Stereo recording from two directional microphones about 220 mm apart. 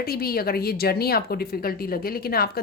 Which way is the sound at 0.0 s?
45° left (ahead or behind).